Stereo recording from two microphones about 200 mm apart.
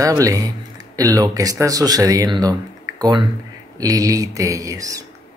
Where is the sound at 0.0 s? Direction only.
15° right (ahead or behind).